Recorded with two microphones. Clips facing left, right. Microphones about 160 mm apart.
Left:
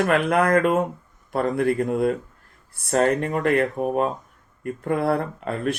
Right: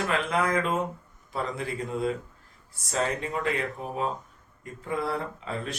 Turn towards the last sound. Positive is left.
turn(degrees=60)  # may be behind; listen again after turning